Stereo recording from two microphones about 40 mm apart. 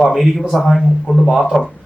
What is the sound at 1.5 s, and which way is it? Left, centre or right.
Speech, left.